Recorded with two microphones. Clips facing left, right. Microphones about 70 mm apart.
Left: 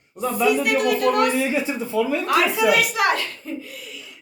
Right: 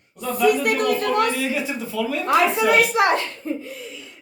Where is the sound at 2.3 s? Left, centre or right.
Right.